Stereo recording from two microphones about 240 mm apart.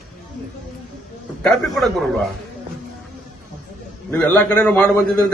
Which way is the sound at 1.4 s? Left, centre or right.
Centre.